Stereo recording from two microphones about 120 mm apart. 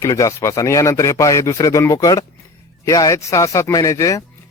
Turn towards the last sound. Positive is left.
turn(degrees=25)  # may be behind; listen again after turning